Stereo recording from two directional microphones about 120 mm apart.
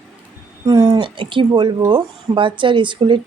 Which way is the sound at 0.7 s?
35° right (ahead or behind).